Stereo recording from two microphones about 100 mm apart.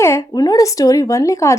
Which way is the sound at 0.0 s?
25° left (ahead or behind).